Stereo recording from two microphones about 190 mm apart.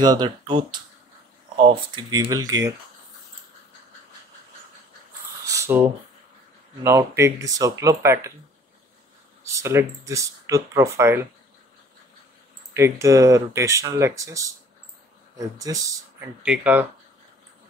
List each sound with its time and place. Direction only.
0.0 s speech: 20° right (ahead or behind)
1.6 s speech: 25° right (ahead or behind)
5.5 s a sound: 15° right (ahead or behind)
6.8 s speech: 15° right (ahead or behind)
9.5 s speech: 15° right (ahead or behind)
12.7 s speech: 15° right (ahead or behind)
15.6 s speech: 15° right (ahead or behind)
16.4 s speech: 5° right (ahead or behind)